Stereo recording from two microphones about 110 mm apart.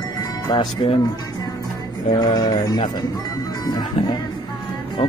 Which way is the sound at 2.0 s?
40° left (ahead or behind).